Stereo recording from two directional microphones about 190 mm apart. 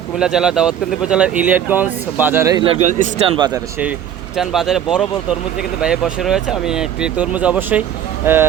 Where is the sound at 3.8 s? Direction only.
5° right (ahead or behind).